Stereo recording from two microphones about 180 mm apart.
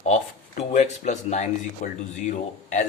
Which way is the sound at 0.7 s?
40° left (ahead or behind).